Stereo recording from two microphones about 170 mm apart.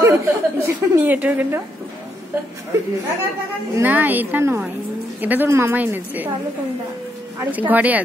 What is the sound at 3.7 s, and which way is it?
A woman's voice, 10° right (ahead or behind).